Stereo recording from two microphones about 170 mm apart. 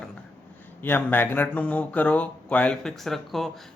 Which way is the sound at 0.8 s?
10° left (ahead or behind).